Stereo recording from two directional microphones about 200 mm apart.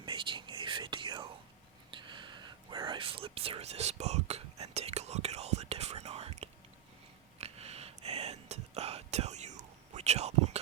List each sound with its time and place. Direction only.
0.0 s whispering: 25° right (ahead or behind)